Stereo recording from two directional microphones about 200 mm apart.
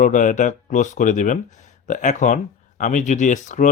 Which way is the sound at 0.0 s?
40° left (ahead or behind).